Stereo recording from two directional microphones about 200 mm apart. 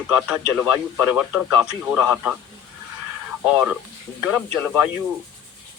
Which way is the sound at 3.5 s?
5° right (ahead or behind).